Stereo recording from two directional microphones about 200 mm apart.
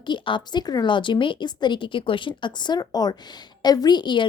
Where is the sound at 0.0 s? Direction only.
25° left (ahead or behind).